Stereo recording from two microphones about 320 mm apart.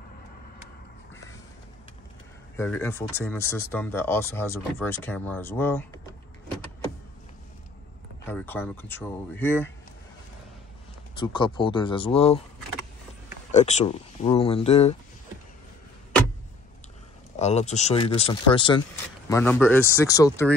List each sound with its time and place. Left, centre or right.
2.5 s speech: centre
8.3 s speech: centre
11.1 s speech: centre
13.5 s speech: left
17.4 s speech: left